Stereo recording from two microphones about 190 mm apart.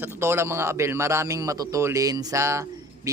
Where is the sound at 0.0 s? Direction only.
15° right (ahead or behind).